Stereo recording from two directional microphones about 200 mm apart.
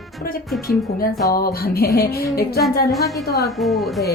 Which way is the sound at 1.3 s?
50° left (ahead or behind).